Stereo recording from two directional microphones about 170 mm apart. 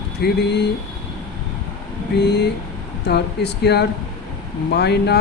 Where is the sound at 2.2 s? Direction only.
80° left.